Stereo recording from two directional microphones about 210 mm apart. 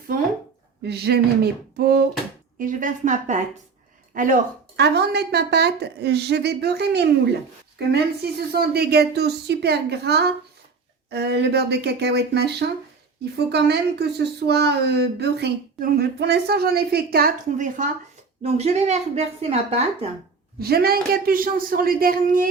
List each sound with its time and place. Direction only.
0.8 s a woman's voice: 50° right (ahead or behind)
4.8 s a woman's voice: 50° right (ahead or behind)
18.4 s speech: 30° right (ahead or behind)
20.6 s a woman's voice: 50° right (ahead or behind)